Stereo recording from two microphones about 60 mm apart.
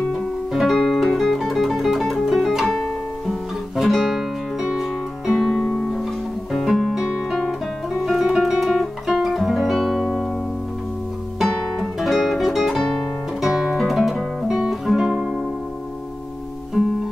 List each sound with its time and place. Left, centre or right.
0.5 s music: centre
2.6 s music: centre
3.7 s music: centre
7.2 s guitar: centre
12.0 s music: centre
13.4 s guitar: centre
16.8 s music: centre